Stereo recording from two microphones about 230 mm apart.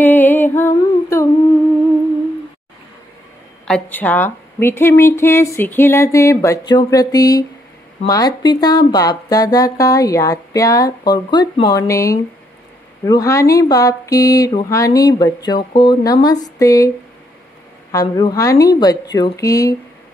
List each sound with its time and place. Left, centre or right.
0.0 s music: centre
3.6 s speech: centre
17.9 s speech: centre